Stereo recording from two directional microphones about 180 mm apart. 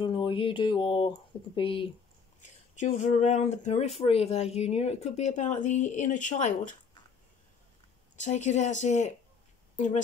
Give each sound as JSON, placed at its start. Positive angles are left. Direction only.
{"t": 0.0, "sound": "a sound", "side_deg": 30}
{"t": 2.7, "sound": "speech", "side_deg": 40}
{"t": 8.2, "sound": "speech", "side_deg": 40}